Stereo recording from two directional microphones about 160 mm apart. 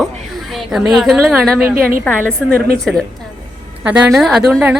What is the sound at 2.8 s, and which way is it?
Speech, 5° left (ahead or behind).